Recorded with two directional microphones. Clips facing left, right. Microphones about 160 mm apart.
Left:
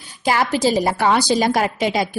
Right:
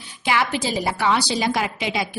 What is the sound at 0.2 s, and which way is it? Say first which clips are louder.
A woman's voice: left 5 dB; 40° left (ahead or behind).